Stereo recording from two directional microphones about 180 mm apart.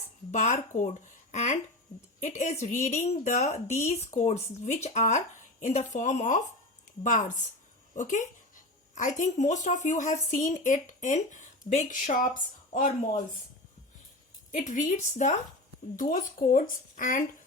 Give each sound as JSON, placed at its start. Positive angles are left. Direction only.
{"t": 0.3, "sound": "speech", "side_deg": 45}
{"t": 14.5, "sound": "speech", "side_deg": 45}